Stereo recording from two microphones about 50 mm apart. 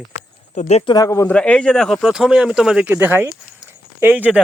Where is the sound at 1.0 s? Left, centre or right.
Left.